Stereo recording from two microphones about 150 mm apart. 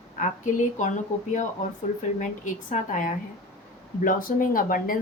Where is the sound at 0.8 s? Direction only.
55° left (ahead or behind).